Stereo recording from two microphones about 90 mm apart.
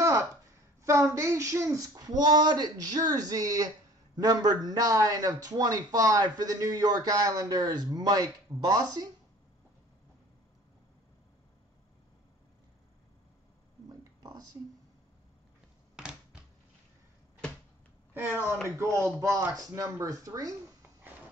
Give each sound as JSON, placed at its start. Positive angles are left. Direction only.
{"t": 0.8, "sound": "speech", "side_deg": -35}
{"t": 14.2, "sound": "a sound", "side_deg": -45}
{"t": 18.1, "sound": "speech", "side_deg": -20}